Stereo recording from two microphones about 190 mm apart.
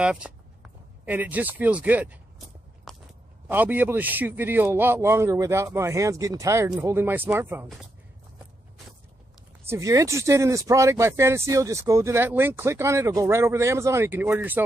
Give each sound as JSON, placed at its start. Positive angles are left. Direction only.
{"t": 0.0, "sound": "speech", "side_deg": -5}
{"t": 2.9, "sound": "biting", "side_deg": 0}
{"t": 3.4, "sound": "speech", "side_deg": -10}
{"t": 9.7, "sound": "speech", "side_deg": -15}